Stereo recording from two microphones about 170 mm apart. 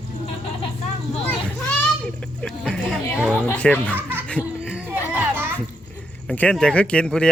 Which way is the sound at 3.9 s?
10° right (ahead or behind).